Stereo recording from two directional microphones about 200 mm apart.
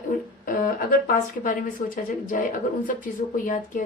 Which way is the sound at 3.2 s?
40° left (ahead or behind).